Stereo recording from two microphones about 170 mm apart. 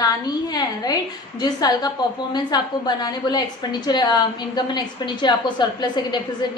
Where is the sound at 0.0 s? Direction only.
25° left (ahead or behind).